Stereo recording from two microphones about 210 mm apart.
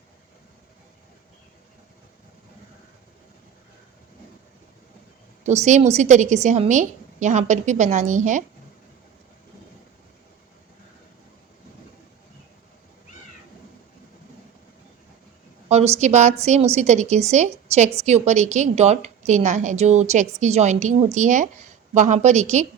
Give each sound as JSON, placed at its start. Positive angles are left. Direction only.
{"t": 5.4, "sound": "a woman's voice", "side_deg": -35}
{"t": 16.0, "sound": "a woman's voice", "side_deg": -35}